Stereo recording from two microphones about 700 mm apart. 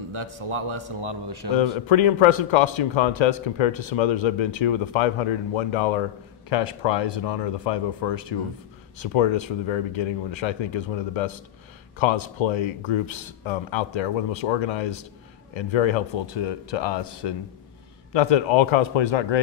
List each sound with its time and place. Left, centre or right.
0.1 s a man's voice: right
1.9 s a man's voice: left